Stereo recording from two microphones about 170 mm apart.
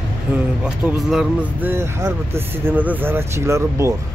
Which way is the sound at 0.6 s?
5° right (ahead or behind).